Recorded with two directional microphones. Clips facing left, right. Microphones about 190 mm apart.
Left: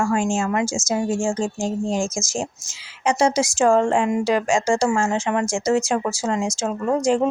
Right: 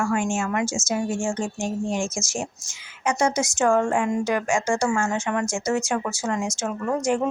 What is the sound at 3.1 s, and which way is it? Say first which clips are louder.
A woman's voice: left 4 dB; 30° left (ahead or behind).